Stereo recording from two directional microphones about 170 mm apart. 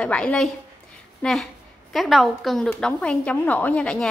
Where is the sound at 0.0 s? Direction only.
5° left (ahead or behind).